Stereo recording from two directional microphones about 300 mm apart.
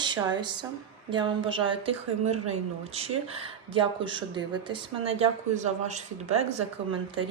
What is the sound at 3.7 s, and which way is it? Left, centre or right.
A woman's voice, centre.